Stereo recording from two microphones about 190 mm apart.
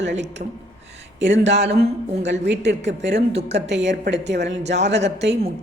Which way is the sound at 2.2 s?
70° right (ahead or behind).